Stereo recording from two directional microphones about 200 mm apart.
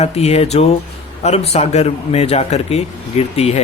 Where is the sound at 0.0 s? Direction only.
30° left (ahead or behind).